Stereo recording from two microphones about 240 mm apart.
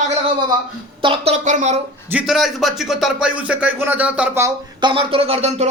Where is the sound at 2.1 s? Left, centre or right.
Centre.